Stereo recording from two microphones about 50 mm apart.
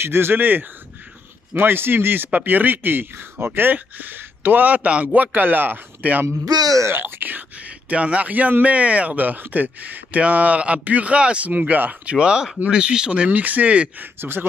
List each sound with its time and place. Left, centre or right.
0.0 s a man's voice: right
7.9 s speech: right
12.2 s speech: centre; by 14.0 s right